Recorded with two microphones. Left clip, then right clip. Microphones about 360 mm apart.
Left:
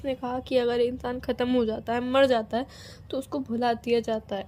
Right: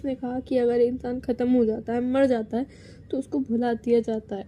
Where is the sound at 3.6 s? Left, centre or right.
Left.